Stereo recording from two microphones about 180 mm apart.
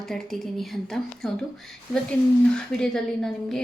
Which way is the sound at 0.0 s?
Centre (ahead or behind).